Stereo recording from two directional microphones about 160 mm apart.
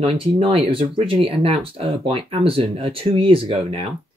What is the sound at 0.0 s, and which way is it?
Speech, 35° right (ahead or behind).